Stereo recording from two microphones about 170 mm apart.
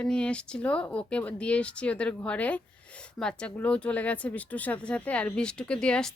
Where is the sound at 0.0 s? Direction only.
5° left (ahead or behind).